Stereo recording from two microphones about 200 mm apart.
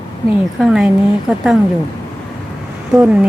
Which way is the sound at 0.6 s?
5° right (ahead or behind).